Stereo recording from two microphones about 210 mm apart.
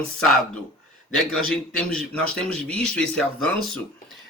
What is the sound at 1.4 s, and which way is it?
Speech, 75° right (ahead or behind).